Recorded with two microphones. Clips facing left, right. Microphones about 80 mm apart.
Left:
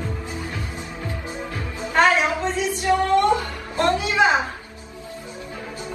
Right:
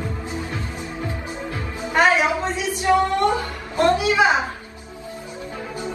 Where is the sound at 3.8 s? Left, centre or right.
Centre.